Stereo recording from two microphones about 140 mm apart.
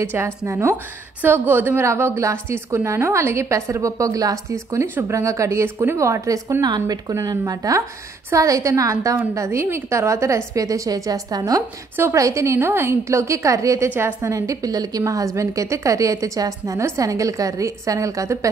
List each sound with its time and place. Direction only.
0.0 s a woman's voice: 15° right (ahead or behind)